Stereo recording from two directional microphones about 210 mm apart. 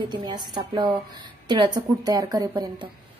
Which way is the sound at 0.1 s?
20° right (ahead or behind).